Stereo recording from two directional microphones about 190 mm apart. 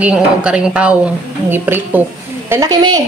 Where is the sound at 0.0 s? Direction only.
5° right (ahead or behind).